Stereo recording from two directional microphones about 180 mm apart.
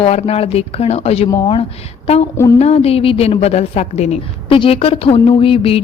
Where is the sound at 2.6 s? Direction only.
35° left (ahead or behind).